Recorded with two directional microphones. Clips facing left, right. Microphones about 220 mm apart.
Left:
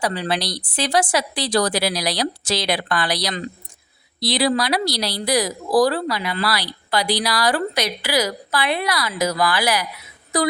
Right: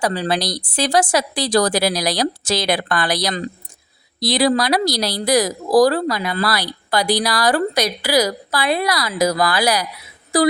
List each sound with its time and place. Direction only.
0.0 s a woman's voice: 40° right (ahead or behind)